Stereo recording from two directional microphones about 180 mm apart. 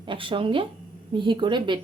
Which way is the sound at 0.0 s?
30° right (ahead or behind).